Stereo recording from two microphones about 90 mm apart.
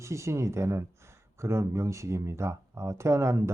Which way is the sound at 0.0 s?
35° right (ahead or behind).